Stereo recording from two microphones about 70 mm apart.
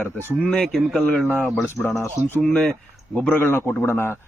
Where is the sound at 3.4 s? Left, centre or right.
Left.